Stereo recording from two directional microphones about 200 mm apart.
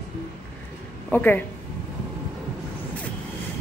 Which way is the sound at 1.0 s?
10° left (ahead or behind).